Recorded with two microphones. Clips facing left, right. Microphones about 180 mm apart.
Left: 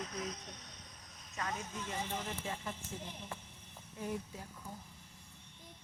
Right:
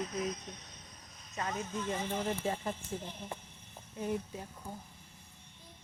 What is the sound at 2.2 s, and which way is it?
Speech, 35° right (ahead or behind).